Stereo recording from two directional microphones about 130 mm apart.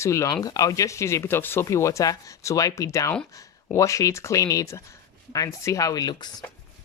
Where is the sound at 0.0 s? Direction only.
25° left (ahead or behind).